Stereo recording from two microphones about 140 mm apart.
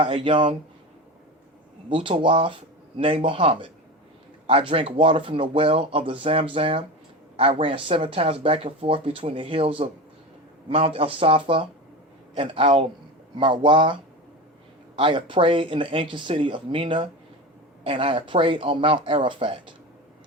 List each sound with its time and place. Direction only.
0.0 s speech: 40° right (ahead or behind)
1.9 s speech: 35° right (ahead or behind)